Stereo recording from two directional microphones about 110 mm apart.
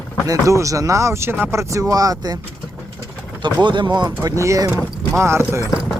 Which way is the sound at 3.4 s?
45° right (ahead or behind).